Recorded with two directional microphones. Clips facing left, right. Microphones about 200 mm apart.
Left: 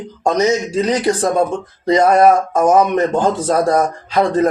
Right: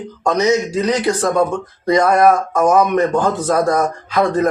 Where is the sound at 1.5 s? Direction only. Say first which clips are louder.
Even; 25° left (ahead or behind).